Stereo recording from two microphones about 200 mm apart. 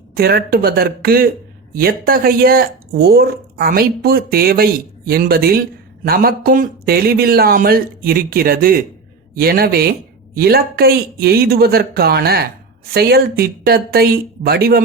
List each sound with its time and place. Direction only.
0.1 s speech: 50° right (ahead or behind)